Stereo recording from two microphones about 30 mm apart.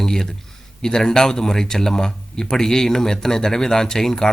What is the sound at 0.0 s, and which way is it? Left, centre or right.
Speech, centre.